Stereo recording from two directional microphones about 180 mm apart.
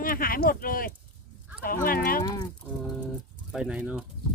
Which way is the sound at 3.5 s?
5° right (ahead or behind).